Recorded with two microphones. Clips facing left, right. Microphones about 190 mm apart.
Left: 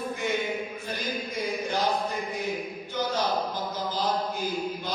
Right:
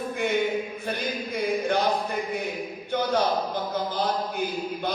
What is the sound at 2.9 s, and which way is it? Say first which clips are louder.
Chant: right 4 dB; 60° right (ahead or behind).